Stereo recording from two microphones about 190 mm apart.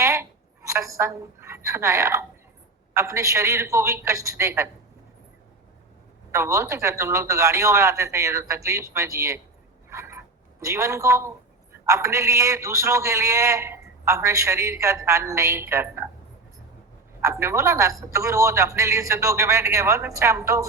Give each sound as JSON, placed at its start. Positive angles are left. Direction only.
{"t": 0.0, "sound": "a sound", "side_deg": -15}
{"t": 2.9, "sound": "a man's voice", "side_deg": -15}
{"t": 6.3, "sound": "a man's voice", "side_deg": -15}
{"t": 9.9, "sound": "a sound", "side_deg": -15}
{"t": 11.9, "sound": "a man's voice", "side_deg": -15}
{"t": 17.2, "sound": "a man's voice", "side_deg": -15}